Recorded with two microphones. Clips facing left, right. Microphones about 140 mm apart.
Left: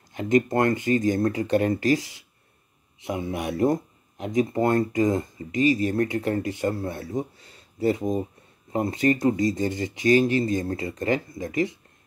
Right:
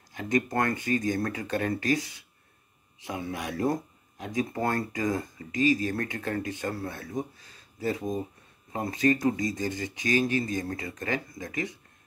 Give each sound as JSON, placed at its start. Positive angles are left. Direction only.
{"t": 0.1, "sound": "speech", "side_deg": 25}
{"t": 3.1, "sound": "speech", "side_deg": 25}